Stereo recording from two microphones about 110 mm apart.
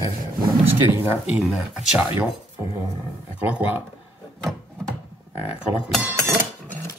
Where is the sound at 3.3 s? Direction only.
15° right (ahead or behind).